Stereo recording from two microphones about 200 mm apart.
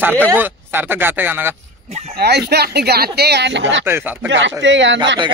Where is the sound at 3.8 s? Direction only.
10° right (ahead or behind).